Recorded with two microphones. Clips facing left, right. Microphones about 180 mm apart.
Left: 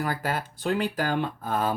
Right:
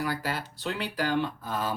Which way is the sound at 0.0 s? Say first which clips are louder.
Left 2 dB; 50° left (ahead or behind).